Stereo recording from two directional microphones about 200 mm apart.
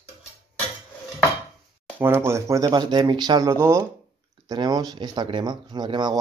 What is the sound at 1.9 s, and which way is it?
Speech, 10° right (ahead or behind).